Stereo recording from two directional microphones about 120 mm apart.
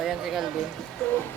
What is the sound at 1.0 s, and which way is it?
Speech, 10° left (ahead or behind).